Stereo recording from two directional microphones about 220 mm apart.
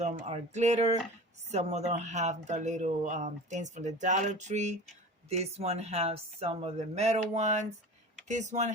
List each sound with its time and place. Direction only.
0.0 s speech: 30° right (ahead or behind)